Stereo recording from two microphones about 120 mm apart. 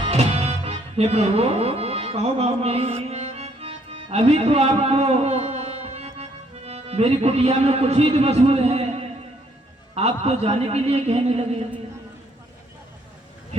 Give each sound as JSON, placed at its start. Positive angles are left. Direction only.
{"t": 0.0, "sound": "music", "side_deg": -60}
{"t": 6.7, "sound": "a man's voice", "side_deg": -60}